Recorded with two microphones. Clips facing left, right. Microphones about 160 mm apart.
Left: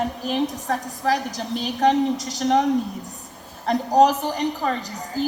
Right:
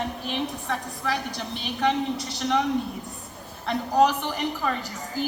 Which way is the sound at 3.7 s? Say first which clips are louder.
Left 4 dB; 40° left (ahead or behind).